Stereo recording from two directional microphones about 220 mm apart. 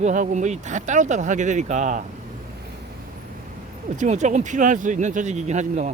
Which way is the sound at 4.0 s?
30° right (ahead or behind).